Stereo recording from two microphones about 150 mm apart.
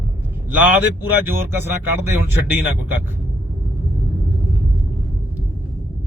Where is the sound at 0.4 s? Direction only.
10° right (ahead or behind).